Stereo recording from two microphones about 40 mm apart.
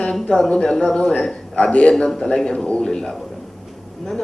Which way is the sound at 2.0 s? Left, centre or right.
Centre.